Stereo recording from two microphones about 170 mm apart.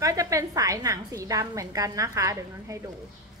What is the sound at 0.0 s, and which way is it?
A woman's voice, 20° right (ahead or behind).